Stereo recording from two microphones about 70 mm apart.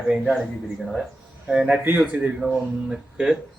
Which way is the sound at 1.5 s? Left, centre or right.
Centre.